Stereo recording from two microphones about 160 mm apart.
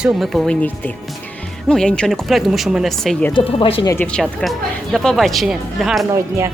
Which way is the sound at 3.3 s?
35° left (ahead or behind).